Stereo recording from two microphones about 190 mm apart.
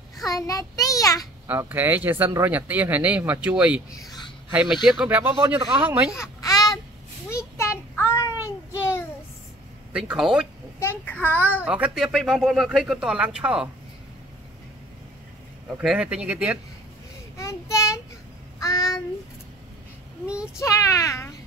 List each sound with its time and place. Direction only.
0.3 s child singing: 20° left (ahead or behind)
1.5 s speech: 10° right (ahead or behind)
6.1 s babbling: 15° left (ahead or behind)
7.2 s child singing: 15° left (ahead or behind)
9.9 s speech: 5° right (ahead or behind)
10.8 s child singing: 10° left (ahead or behind)
11.6 s speech: 5° right (ahead or behind)
15.8 s speech: 5° right (ahead or behind)
17.4 s child singing: 15° left (ahead or behind)
20.5 s speech: 15° left (ahead or behind)